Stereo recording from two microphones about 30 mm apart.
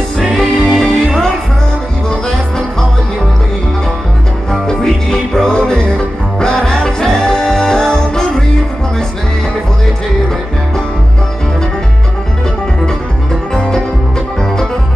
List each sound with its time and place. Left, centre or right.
0.2 s music: centre
0.6 s music: centre
4.5 s music: centre
13.6 s music: left